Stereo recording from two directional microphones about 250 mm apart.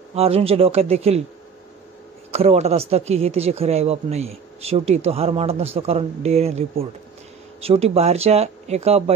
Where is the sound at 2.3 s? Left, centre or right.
Right.